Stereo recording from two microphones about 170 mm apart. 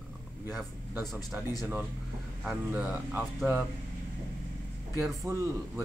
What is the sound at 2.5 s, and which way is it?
Speech, 5° right (ahead or behind).